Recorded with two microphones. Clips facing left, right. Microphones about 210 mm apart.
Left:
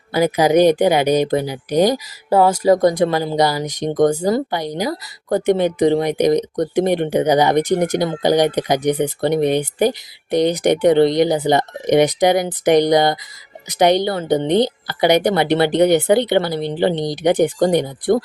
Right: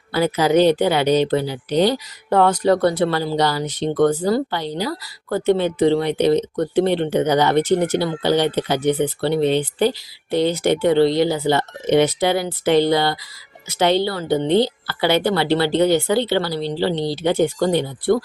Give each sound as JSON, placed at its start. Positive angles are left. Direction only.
{"t": 0.1, "sound": "speech", "side_deg": 15}